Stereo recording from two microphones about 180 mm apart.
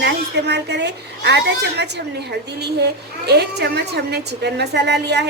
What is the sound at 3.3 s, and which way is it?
A woman's voice, 65° right (ahead or behind).